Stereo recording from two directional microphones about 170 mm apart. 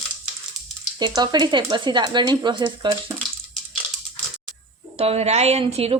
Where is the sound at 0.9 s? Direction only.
25° right (ahead or behind).